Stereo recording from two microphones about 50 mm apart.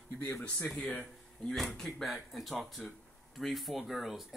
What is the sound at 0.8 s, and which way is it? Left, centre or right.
Speech, centre.